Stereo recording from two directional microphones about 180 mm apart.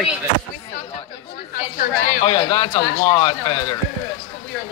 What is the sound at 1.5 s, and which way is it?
Speech, 45° left (ahead or behind).